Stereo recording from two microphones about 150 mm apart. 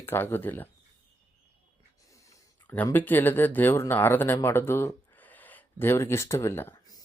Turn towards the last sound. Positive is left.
turn(degrees=15)  # may be behind; listen again after turning